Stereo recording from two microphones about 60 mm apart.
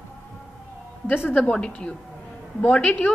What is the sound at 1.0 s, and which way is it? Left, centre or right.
A woman's voice, left.